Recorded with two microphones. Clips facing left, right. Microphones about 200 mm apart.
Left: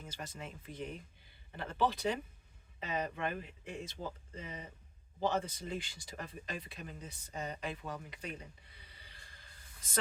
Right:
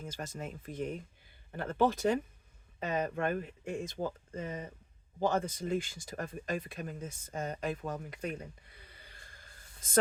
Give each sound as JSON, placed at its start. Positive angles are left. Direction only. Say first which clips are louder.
{"t": 0.0, "sound": "speech", "louder": "right 5 dB", "side_deg": -45}